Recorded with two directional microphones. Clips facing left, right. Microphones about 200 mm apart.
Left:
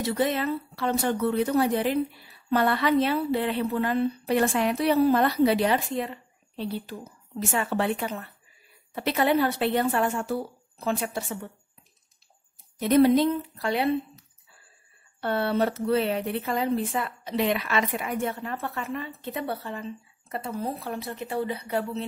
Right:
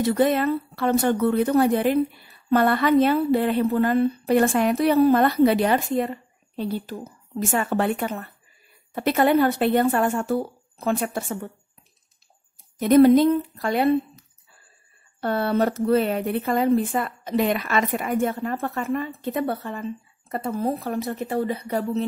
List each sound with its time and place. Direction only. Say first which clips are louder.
0.0 s speech: right 6 dB; 55° right (ahead or behind)
12.8 s speech: right 5 dB; 50° right (ahead or behind)